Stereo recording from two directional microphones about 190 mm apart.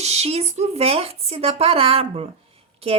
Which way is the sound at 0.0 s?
35° right (ahead or behind).